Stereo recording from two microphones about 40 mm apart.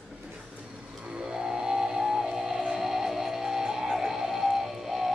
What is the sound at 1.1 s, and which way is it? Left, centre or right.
Music, centre.